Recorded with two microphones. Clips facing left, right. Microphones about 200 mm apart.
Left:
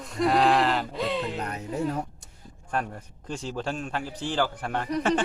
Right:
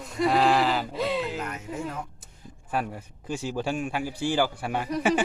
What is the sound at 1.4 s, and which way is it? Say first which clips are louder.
Speech: left 3 dB; 35° left (ahead or behind).